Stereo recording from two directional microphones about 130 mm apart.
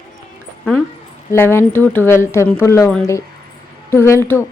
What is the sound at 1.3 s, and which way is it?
Speech, 20° left (ahead or behind).